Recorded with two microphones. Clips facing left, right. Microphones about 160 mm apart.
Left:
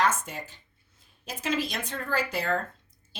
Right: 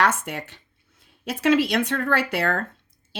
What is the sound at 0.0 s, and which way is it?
A woman's voice, 70° right (ahead or behind).